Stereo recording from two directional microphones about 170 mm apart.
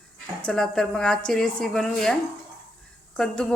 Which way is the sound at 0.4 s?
5° left (ahead or behind).